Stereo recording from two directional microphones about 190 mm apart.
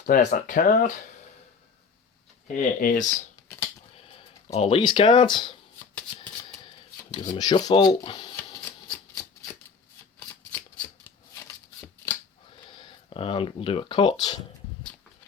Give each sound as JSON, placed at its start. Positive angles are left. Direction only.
{"t": 0.0, "sound": "speech", "side_deg": 40}
{"t": 2.5, "sound": "speech", "side_deg": 45}
{"t": 4.5, "sound": "speech", "side_deg": 30}
{"t": 6.9, "sound": "speech", "side_deg": 20}
{"t": 11.0, "sound": "shuffling cards", "side_deg": 10}
{"t": 12.5, "sound": "speech", "side_deg": 25}